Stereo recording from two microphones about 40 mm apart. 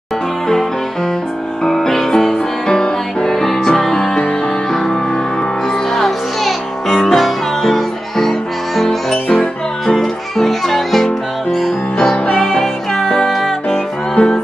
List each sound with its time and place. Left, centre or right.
1.6 s music: centre
5.7 s music: centre
14.1 s music: centre